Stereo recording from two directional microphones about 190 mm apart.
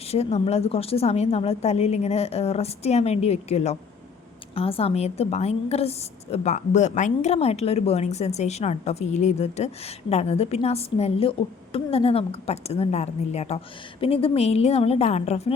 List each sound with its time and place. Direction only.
0.1 s a woman's voice: 35° left (ahead or behind)